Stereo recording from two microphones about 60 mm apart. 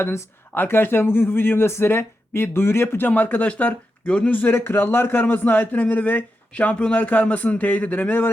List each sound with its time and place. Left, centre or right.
0.0 s speech: left
0.5 s speech: left
3.1 s a man's voice: left